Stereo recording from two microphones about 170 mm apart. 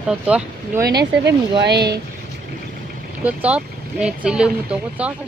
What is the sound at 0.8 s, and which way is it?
Speech, 75° right (ahead or behind).